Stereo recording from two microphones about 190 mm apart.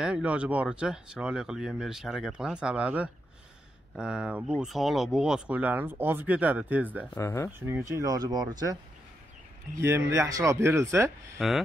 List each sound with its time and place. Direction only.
0.0 s speech: 5° right (ahead or behind)
7.2 s speech: 15° left (ahead or behind)
7.5 s speech: 15° right (ahead or behind)
9.8 s speech: 15° right (ahead or behind)
11.3 s speech: centre (ahead or behind)